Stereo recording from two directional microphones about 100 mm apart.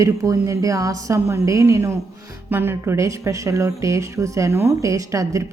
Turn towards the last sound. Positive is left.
turn(degrees=-35)  # may be behind; listen again after turning